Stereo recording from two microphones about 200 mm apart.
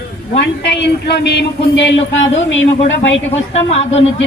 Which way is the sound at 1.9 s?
70° left (ahead or behind).